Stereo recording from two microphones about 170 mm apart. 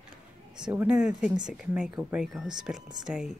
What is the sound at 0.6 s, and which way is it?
Speech, 5° right (ahead or behind).